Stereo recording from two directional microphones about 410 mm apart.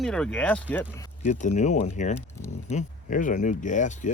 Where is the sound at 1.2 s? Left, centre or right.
Centre.